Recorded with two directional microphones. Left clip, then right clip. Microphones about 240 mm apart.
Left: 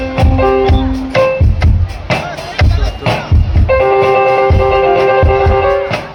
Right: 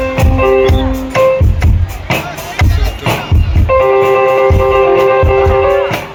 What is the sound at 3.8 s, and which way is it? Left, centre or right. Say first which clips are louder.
Music: right 1 dB; left.